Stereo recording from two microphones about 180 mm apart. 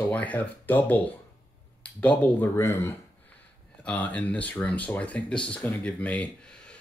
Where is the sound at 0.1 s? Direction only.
10° left (ahead or behind).